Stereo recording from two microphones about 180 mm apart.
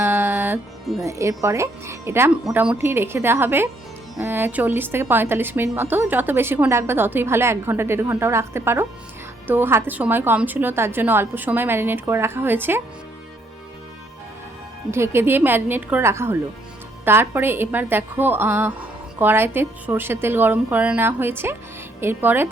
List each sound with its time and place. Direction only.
0.0 s music: 10° right (ahead or behind)
1.0 s a woman's voice: 15° right (ahead or behind)
14.8 s a woman's voice: 15° right (ahead or behind)